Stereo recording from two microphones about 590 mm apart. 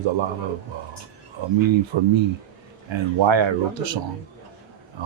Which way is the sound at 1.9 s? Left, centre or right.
Right.